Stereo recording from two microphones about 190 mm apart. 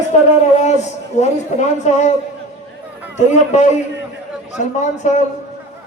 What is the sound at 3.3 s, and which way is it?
Speech, 40° left (ahead or behind).